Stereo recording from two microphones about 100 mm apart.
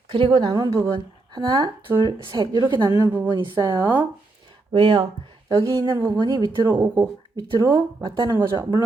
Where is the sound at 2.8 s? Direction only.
25° right (ahead or behind).